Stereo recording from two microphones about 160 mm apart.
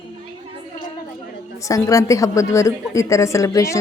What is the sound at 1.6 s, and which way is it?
A woman's voice, 20° left (ahead or behind).